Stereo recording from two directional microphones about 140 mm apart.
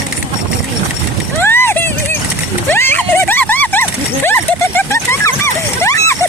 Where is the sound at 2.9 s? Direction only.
15° left (ahead or behind).